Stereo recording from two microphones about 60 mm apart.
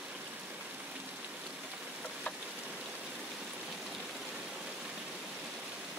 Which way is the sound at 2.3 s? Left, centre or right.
Left.